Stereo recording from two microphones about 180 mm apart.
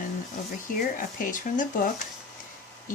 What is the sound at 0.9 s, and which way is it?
Speech, 50° left (ahead or behind).